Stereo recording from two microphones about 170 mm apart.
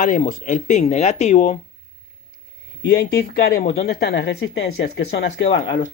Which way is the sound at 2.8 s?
65° left (ahead or behind).